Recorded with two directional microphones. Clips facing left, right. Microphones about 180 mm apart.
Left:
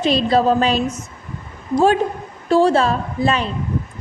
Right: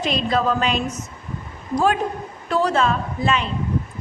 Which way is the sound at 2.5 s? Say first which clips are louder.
Left 5 dB; 30° left (ahead or behind).